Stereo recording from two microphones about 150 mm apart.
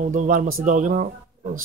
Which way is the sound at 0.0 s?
60° right (ahead or behind).